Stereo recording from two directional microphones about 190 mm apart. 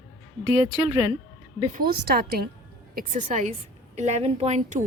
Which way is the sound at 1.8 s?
55° right (ahead or behind).